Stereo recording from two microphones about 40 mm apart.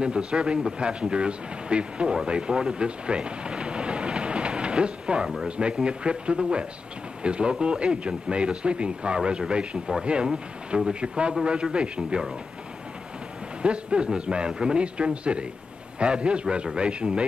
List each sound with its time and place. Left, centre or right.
0.0 s speech: right
2.2 s thunder: right
5.6 s speech: right
13.6 s speech: right